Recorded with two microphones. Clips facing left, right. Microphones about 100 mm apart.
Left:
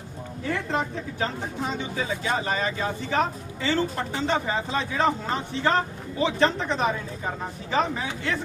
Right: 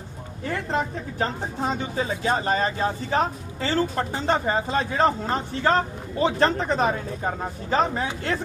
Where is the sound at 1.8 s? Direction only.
40° right (ahead or behind).